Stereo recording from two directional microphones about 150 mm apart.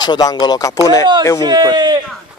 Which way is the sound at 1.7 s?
30° right (ahead or behind).